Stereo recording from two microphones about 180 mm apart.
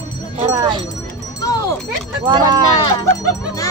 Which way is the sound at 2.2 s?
25° right (ahead or behind).